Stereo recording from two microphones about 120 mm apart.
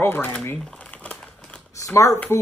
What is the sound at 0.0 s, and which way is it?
Speech, 15° left (ahead or behind).